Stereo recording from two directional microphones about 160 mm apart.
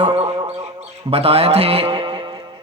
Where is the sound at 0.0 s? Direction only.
35° right (ahead or behind).